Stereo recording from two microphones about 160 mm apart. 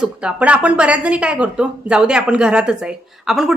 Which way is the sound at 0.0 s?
5° right (ahead or behind).